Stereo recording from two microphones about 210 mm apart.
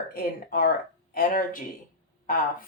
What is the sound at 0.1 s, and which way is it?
Speech, 45° left (ahead or behind).